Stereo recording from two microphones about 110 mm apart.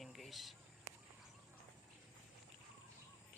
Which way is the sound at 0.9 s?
30° right (ahead or behind).